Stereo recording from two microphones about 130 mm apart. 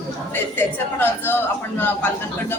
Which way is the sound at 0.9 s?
15° left (ahead or behind).